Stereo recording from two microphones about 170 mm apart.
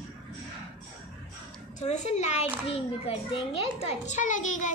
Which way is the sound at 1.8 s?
40° left (ahead or behind).